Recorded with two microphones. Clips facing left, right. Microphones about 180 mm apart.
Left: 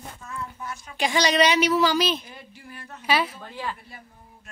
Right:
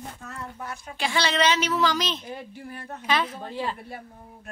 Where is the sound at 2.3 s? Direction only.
55° right (ahead or behind).